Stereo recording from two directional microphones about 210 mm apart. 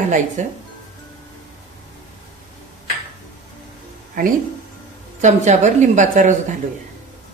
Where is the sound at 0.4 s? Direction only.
35° right (ahead or behind).